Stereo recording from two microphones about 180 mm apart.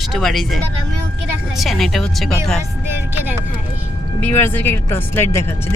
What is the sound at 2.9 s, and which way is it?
Music, 15° right (ahead or behind).